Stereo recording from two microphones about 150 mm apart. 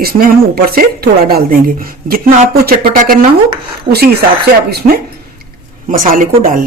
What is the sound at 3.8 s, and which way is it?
Speech, 90° right.